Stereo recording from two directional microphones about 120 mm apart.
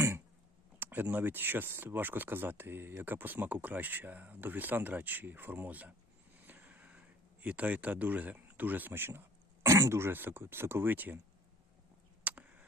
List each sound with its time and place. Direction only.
0.8 s speech: 15° right (ahead or behind)
6.4 s vehicle: 15° right (ahead or behind)
7.4 s speech: 10° right (ahead or behind)
12.2 s a sound: 10° right (ahead or behind)